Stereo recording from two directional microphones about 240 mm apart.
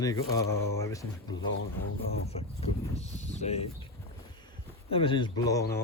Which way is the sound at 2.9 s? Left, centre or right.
Left.